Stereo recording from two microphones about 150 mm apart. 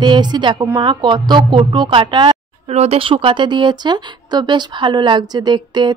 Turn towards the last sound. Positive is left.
turn(degrees=-30)  # may be behind; listen again after turning